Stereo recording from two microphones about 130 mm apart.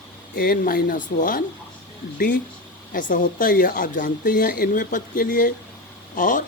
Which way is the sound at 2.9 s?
90° left.